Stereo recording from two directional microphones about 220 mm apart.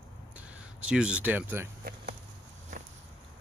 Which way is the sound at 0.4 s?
5° right (ahead or behind).